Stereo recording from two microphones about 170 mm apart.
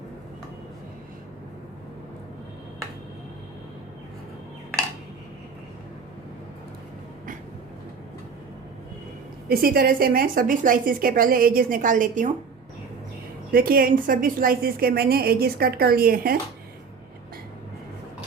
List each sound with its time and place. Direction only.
9.5 s a woman's voice: 60° right (ahead or behind)
13.5 s a woman's voice: 60° right (ahead or behind)